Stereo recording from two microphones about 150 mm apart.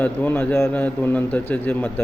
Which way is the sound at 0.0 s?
10° left (ahead or behind).